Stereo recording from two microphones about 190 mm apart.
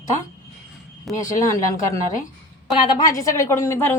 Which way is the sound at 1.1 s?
Centre (ahead or behind).